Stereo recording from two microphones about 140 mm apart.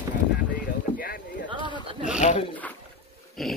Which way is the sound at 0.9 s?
90° left.